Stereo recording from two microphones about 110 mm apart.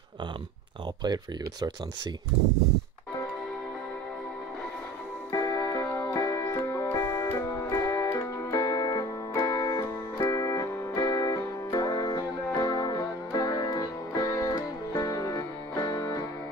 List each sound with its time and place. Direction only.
1.0 s speech: 40° right (ahead or behind)
5.3 s music: 35° left (ahead or behind)